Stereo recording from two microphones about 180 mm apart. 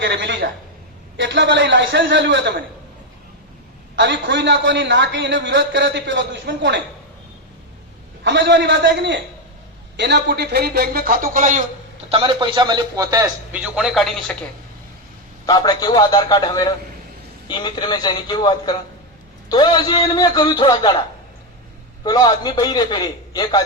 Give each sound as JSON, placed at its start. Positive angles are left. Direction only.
{"t": 0.0, "sound": "a man's voice", "side_deg": -85}
{"t": 3.9, "sound": "a man's voice", "side_deg": -80}
{"t": 8.2, "sound": "a man's voice", "side_deg": -75}
{"t": 12.1, "sound": "a man's voice", "side_deg": -25}
{"t": 13.5, "sound": "speech", "side_deg": -5}
{"t": 15.4, "sound": "a man's voice", "side_deg": 20}
{"t": 22.0, "sound": "a man's voice", "side_deg": 20}